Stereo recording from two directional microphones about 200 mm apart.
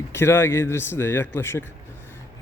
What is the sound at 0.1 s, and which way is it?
Speech, 10° left (ahead or behind).